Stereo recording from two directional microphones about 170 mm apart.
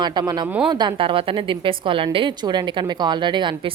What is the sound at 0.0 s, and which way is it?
Speech, 25° right (ahead or behind).